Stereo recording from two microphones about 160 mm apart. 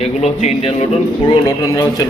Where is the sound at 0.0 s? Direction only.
40° left (ahead or behind).